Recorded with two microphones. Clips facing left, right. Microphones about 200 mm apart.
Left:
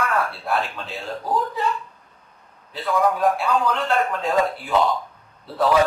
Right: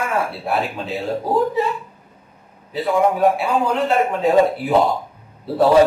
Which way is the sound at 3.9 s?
15° right (ahead or behind).